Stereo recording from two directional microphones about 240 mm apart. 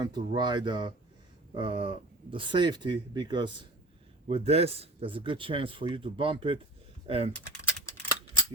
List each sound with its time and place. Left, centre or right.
0.0 s speech: centre